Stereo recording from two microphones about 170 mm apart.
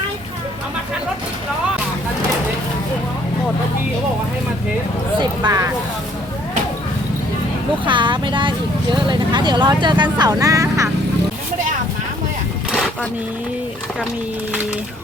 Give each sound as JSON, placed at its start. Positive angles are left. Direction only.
{"t": 5.2, "sound": "speech", "side_deg": -25}
{"t": 7.9, "sound": "speech", "side_deg": -30}
{"t": 12.7, "sound": "a sound", "side_deg": 0}